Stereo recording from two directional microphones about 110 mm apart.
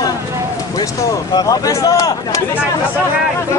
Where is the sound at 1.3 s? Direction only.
35° left (ahead or behind).